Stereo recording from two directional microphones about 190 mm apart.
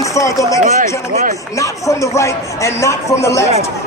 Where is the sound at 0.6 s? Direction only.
40° right (ahead or behind).